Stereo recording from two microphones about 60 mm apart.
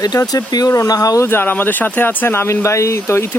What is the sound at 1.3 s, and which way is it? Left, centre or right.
Speech, left.